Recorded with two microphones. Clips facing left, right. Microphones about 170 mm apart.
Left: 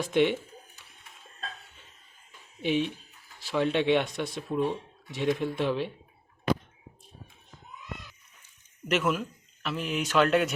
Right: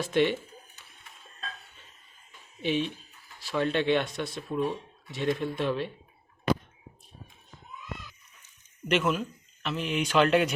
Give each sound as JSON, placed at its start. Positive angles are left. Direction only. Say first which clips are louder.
{"t": 0.0, "sound": "speech", "louder": "left 1 dB", "side_deg": 15}
{"t": 2.6, "sound": "speech", "louder": "left 1 dB", "side_deg": 15}
{"t": 8.9, "sound": "speech", "louder": "right 1 dB", "side_deg": 5}